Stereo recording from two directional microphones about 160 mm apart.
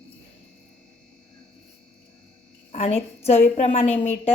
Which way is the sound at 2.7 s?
45° left (ahead or behind).